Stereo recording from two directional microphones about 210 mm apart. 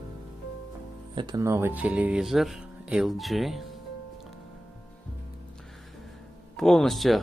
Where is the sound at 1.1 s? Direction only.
20° right (ahead or behind); by 3.6 s centre (ahead or behind).